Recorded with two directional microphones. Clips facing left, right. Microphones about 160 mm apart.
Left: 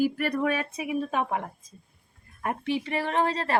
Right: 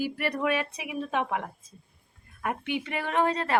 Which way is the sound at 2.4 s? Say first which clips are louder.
Left 2 dB; 35° left (ahead or behind).